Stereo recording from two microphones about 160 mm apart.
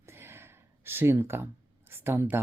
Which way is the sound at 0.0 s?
15° right (ahead or behind).